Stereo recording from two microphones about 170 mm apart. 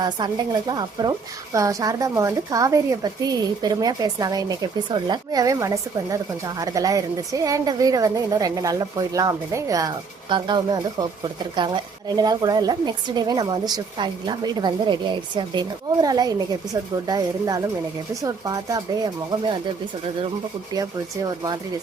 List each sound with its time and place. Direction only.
0.0 s a woman's voice: 25° right (ahead or behind)